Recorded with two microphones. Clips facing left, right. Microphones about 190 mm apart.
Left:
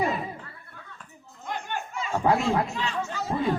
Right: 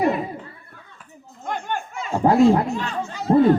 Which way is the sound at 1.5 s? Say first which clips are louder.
Right 5 dB; 50° right (ahead or behind).